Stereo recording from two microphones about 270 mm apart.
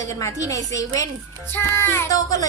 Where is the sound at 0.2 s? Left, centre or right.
Centre.